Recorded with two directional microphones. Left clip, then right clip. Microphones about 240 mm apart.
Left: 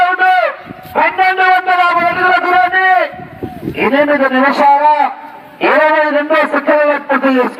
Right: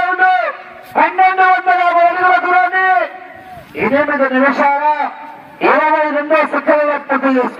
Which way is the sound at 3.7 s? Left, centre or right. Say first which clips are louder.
Left 3 dB; left.